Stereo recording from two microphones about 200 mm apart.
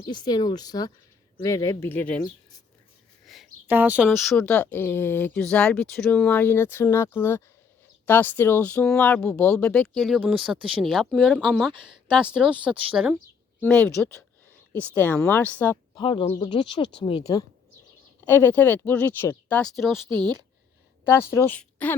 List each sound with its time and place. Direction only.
0.1 s speech: 20° left (ahead or behind)
3.2 s a sound: 5° right (ahead or behind)
4.2 s speech: centre (ahead or behind)
13.6 s speech: 5° left (ahead or behind)
16.0 s speech: 25° left (ahead or behind)
18.3 s speech: 10° left (ahead or behind)
21.0 s a woman's voice: 10° left (ahead or behind)